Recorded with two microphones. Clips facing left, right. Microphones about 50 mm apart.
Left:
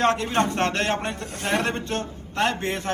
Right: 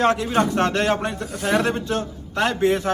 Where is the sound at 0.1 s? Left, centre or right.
Left.